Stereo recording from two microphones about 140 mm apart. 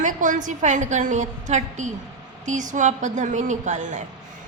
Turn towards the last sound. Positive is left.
turn(degrees=-65)  # may be behind; listen again after turning